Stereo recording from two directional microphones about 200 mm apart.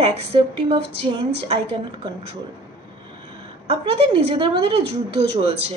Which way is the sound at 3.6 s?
25° right (ahead or behind).